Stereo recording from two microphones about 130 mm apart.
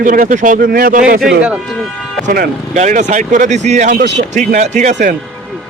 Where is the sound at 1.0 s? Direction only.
5° right (ahead or behind).